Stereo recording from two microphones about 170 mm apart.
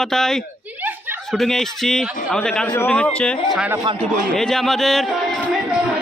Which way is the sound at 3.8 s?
30° right (ahead or behind).